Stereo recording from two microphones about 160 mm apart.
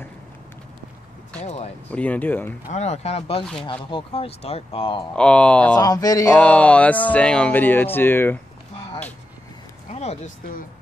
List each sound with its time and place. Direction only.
1.4 s a sound: 45° left (ahead or behind)
1.9 s speech: 10° left (ahead or behind)
2.7 s speech: 45° left (ahead or behind)
5.1 s speech: 5° left (ahead or behind)
5.8 s speech: 25° left (ahead or behind)
6.3 s speech: 10° left (ahead or behind)
9.9 s a sound: 45° left (ahead or behind)